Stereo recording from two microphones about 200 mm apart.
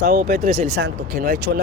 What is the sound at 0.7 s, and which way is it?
Speech, 50° right (ahead or behind).